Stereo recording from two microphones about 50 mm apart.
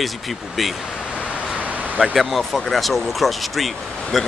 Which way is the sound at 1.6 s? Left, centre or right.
Right.